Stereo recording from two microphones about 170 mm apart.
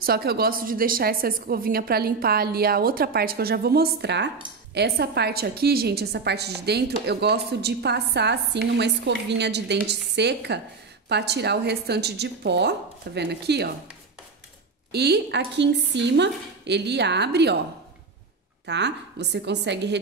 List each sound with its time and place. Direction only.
0.0 s a woman's voice: 65° right (ahead or behind); by 4.3 s 85° right
4.7 s a woman's voice: 70° right (ahead or behind)
14.9 s speech: 75° right (ahead or behind)
18.7 s a woman's voice: 90° right